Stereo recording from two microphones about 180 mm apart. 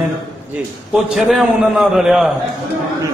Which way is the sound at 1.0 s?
Centre (ahead or behind).